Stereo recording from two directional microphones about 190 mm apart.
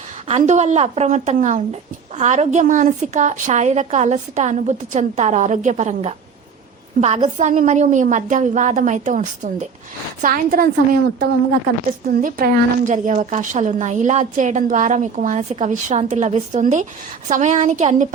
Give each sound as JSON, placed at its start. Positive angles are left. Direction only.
{"t": 0.3, "sound": "a woman's voice", "side_deg": -35}
{"t": 12.2, "sound": "speech", "side_deg": -45}